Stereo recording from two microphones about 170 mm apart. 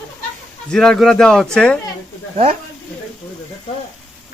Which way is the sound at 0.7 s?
5° left (ahead or behind).